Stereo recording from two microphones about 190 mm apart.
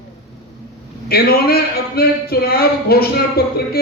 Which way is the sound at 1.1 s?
55° left (ahead or behind).